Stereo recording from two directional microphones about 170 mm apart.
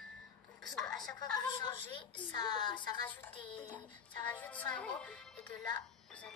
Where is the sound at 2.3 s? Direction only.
25° left (ahead or behind).